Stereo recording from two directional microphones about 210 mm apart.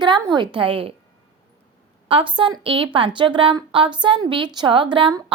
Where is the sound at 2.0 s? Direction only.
25° right (ahead or behind).